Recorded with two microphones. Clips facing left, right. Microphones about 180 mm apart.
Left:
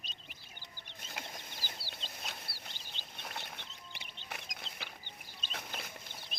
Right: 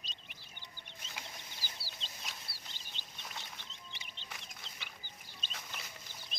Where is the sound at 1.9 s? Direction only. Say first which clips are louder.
Left 3 dB; 60° left (ahead or behind).